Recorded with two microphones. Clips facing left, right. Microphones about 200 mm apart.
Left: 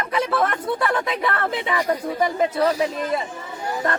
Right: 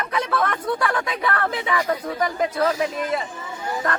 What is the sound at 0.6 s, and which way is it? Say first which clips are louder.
Speech: left 1 dB; 25° left (ahead or behind).